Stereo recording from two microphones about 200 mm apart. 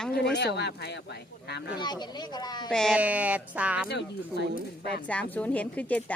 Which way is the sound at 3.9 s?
55° left (ahead or behind).